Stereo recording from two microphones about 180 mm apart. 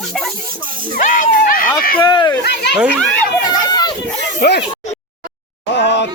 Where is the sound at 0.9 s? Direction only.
45° left (ahead or behind).